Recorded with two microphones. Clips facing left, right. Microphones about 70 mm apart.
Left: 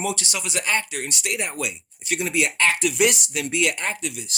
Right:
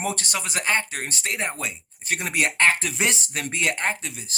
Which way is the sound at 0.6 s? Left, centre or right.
Right.